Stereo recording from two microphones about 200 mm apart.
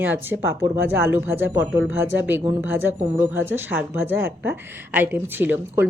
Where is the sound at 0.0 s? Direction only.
10° right (ahead or behind).